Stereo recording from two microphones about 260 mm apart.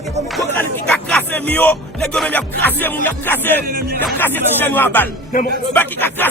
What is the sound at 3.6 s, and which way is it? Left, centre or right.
Music, right.